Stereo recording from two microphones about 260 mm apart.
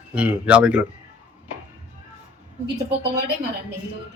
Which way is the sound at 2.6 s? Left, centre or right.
Right.